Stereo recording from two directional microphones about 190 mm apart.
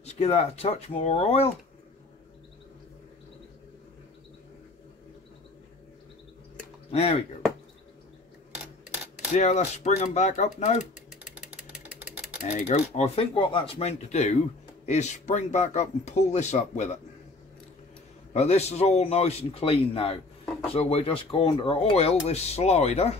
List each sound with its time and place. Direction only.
0.0 s speech: 35° left (ahead or behind)
6.9 s speech: 30° left (ahead or behind)
9.3 s speech: 40° left (ahead or behind)
11.3 s a sound: 5° right (ahead or behind)
12.4 s speech: 40° left (ahead or behind)
18.3 s speech: 35° left (ahead or behind)